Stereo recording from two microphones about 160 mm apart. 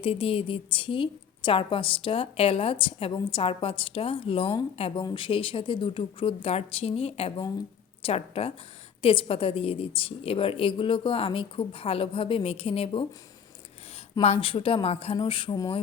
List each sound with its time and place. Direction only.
0.0 s a woman's voice: 35° left (ahead or behind)
14.2 s a woman's voice: 35° left (ahead or behind)